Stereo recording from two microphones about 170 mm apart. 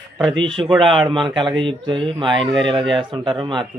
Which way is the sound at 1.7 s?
30° right (ahead or behind).